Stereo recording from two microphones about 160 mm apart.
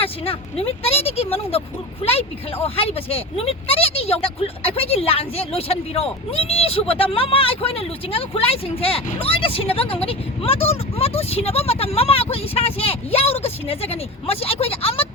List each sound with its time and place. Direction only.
0.0 s vehicle: 35° left (ahead or behind)
0.8 s speech: 40° left (ahead or behind)